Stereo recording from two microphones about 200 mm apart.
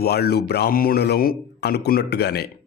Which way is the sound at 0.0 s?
55° left (ahead or behind).